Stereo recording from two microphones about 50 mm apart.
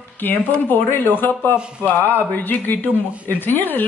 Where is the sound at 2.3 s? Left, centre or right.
Left.